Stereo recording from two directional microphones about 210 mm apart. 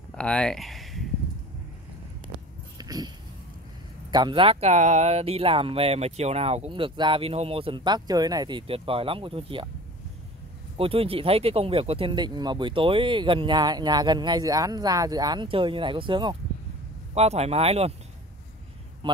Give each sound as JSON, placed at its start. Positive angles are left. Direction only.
{"t": 0.1, "sound": "speech", "side_deg": 5}
{"t": 2.3, "sound": "a sound", "side_deg": -20}
{"t": 4.1, "sound": "speech", "side_deg": -20}
{"t": 10.8, "sound": "speech", "side_deg": -25}
{"t": 19.0, "sound": "speech", "side_deg": -20}